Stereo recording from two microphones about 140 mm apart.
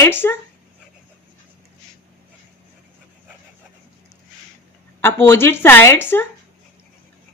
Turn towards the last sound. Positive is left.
turn(degrees=15)  # may be behind; listen again after turning